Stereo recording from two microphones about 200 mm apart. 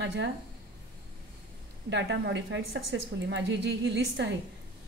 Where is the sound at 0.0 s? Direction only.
60° right (ahead or behind).